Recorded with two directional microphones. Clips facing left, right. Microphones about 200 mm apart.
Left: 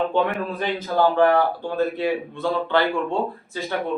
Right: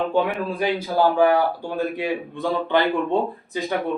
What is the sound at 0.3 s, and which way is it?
A man's voice, 5° right (ahead or behind).